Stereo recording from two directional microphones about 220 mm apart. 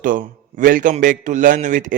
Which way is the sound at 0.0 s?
35° right (ahead or behind).